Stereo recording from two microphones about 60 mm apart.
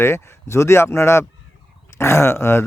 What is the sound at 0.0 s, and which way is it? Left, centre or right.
Speech, left.